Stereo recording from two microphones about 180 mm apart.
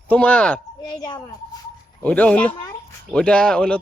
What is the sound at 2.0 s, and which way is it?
Speech, 10° left (ahead or behind).